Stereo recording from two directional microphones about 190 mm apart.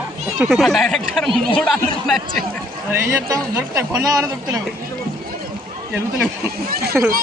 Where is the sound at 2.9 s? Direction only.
10° right (ahead or behind).